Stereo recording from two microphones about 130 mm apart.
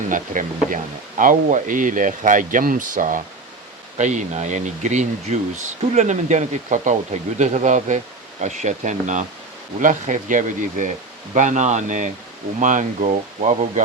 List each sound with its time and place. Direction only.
0.1 s speech: 90° right
3.9 s speech: 70° right (ahead or behind)
9.8 s speech: 80° right; by 13.8 s 65° right (ahead or behind)